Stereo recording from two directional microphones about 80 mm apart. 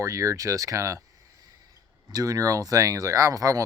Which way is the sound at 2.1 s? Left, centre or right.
Right.